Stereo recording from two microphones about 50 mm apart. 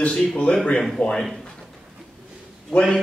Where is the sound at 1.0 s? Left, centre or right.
Left.